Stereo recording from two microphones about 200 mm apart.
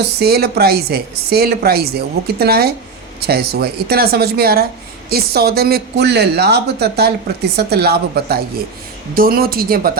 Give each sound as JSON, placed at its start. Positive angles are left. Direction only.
{"t": 0.2, "sound": "speech", "side_deg": -50}